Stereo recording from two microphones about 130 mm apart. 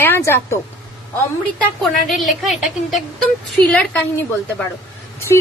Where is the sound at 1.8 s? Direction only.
Centre (ahead or behind).